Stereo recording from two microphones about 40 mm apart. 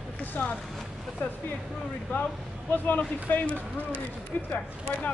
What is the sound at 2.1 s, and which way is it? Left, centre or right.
Speech, left.